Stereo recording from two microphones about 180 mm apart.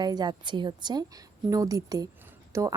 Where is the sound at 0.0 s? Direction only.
25° right (ahead or behind).